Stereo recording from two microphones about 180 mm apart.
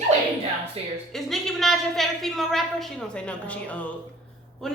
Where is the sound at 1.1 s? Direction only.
Centre (ahead or behind).